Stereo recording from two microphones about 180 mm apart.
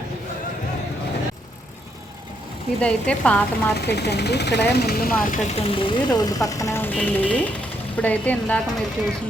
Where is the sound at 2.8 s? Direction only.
5° left (ahead or behind).